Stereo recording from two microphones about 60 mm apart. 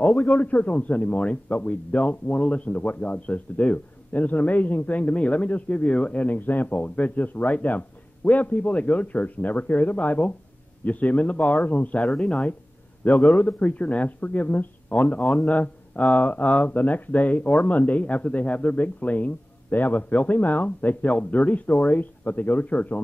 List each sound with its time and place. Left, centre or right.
0.4 s speech: left